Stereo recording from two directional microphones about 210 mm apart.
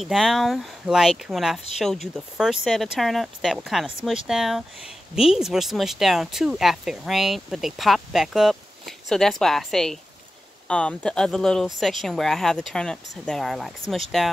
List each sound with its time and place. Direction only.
0.0 s speech: centre (ahead or behind)